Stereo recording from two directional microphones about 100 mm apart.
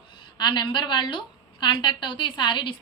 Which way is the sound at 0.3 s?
50° left (ahead or behind).